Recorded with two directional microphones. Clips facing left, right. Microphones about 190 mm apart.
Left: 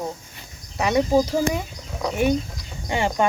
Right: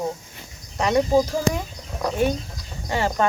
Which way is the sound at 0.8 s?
10° left (ahead or behind).